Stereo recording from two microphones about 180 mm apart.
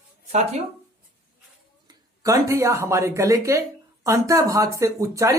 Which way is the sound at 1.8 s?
20° right (ahead or behind).